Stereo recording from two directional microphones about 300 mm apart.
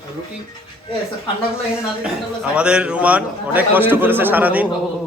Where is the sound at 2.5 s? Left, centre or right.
Centre.